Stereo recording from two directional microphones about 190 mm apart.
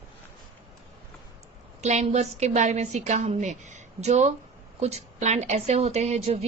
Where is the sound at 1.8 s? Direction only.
35° right (ahead or behind).